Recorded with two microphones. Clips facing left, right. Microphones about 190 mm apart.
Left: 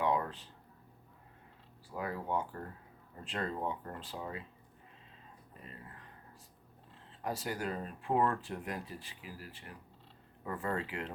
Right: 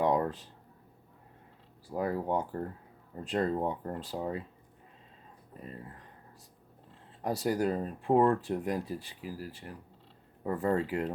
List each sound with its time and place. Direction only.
0.0 s a sound: 40° right (ahead or behind)
1.9 s speech: 40° right (ahead or behind)
7.2 s speech: 35° right (ahead or behind)